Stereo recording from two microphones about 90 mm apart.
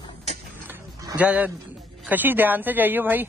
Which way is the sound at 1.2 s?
15° right (ahead or behind).